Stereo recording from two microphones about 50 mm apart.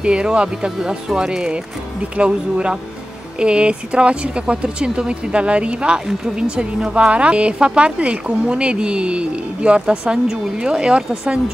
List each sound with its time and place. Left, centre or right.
0.0 s speech: centre